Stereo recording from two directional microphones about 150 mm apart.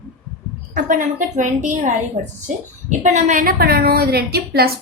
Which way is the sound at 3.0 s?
55° right (ahead or behind).